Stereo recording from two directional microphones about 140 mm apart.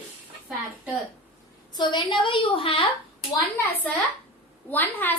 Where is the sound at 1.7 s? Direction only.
30° left (ahead or behind).